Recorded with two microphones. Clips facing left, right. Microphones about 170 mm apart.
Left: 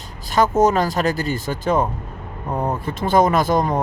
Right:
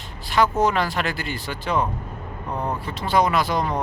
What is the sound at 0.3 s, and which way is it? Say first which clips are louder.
Speech: left 4 dB; 45° left (ahead or behind).